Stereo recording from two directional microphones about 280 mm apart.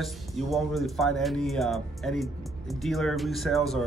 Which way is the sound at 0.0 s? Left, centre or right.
Centre.